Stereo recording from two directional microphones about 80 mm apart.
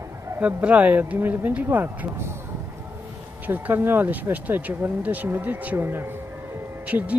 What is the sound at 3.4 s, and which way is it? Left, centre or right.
Speech, right.